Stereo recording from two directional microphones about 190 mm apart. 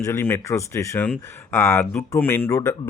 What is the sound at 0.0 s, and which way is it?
Speech, 10° left (ahead or behind).